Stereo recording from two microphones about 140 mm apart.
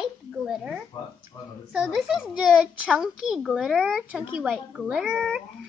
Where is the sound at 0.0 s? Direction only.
5° right (ahead or behind).